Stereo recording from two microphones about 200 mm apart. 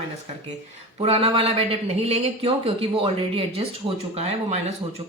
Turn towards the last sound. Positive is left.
turn(degrees=-30)  # may be behind; listen again after turning